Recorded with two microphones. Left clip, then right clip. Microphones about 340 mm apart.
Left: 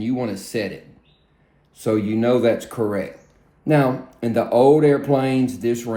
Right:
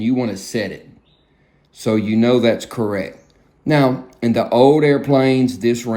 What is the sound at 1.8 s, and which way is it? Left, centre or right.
Speech, right.